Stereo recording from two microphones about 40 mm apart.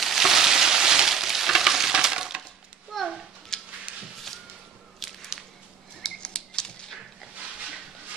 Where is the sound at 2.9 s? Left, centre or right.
Centre.